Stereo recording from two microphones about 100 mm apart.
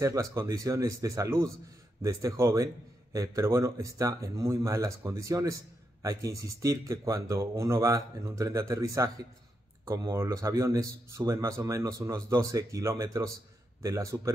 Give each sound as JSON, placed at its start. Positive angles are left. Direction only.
{"t": 0.0, "sound": "a man's voice", "side_deg": -35}
{"t": 10.1, "sound": "a man's voice", "side_deg": -30}